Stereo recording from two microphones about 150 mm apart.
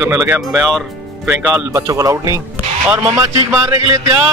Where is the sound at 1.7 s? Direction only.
20° right (ahead or behind).